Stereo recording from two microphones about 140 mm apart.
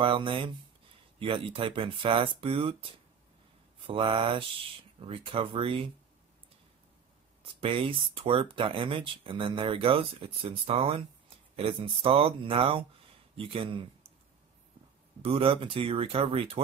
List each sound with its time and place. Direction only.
0.0 s speech: 35° right (ahead or behind)
7.6 s speech: 40° right (ahead or behind)
15.2 s speech: 40° right (ahead or behind)